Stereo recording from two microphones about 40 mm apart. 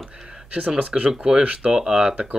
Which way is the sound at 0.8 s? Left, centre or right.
Right.